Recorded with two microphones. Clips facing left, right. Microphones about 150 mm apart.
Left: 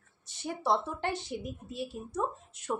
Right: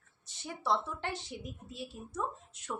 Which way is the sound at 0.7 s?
55° left (ahead or behind).